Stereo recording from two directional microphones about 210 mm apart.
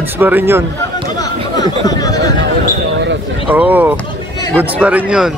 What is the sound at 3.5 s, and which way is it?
Speech, 10° right (ahead or behind).